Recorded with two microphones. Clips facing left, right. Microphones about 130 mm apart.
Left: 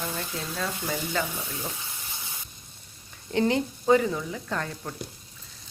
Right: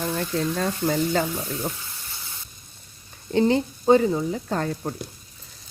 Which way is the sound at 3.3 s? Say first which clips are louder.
Right 4 dB; 30° right (ahead or behind).